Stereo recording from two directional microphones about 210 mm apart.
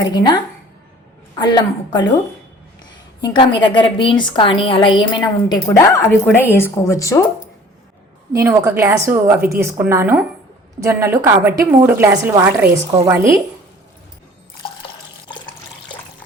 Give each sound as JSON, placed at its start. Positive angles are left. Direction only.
{"t": 0.1, "sound": "a woman's voice", "side_deg": 20}
{"t": 1.4, "sound": "a woman's voice", "side_deg": 20}
{"t": 3.2, "sound": "a woman's voice", "side_deg": 20}
{"t": 8.3, "sound": "a woman's voice", "side_deg": -15}